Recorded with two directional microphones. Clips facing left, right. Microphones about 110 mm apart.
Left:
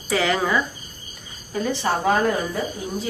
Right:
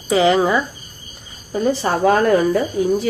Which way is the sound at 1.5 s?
35° right (ahead or behind).